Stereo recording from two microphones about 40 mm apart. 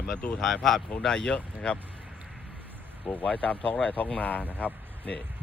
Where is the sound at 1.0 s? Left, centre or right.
Centre.